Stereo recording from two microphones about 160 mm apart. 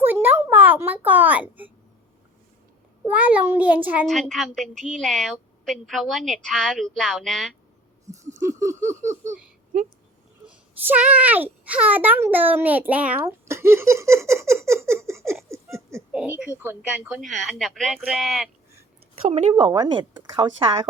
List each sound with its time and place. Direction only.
0.0 s a sound: 10° right (ahead or behind)
3.1 s a child's voice: 10° right (ahead or behind)
4.0 s a woman's voice: 5° left (ahead or behind)
8.0 s a sound: 20° right (ahead or behind)
10.4 s a child's voice: 10° right (ahead or behind)
15.4 s laughter: 15° right (ahead or behind)
16.1 s a woman's voice: 10° right (ahead or behind)
17.2 s a woman's voice: centre (ahead or behind)
19.3 s speech: 30° right (ahead or behind)